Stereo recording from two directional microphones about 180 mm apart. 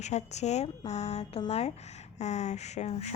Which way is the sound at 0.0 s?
40° left (ahead or behind).